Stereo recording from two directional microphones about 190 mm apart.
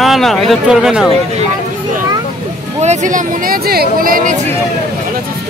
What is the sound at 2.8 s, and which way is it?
Speech, 40° right (ahead or behind).